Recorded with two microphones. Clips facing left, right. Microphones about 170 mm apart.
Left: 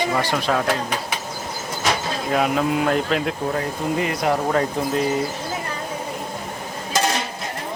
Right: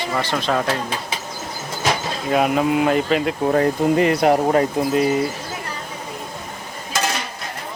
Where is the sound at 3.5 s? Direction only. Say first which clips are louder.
Right 7 dB; 55° right (ahead or behind).